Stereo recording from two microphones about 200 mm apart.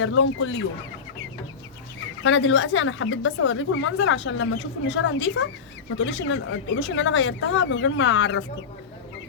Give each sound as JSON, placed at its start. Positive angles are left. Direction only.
{"t": 0.0, "sound": "speech", "side_deg": 70}
{"t": 2.2, "sound": "speech", "side_deg": 75}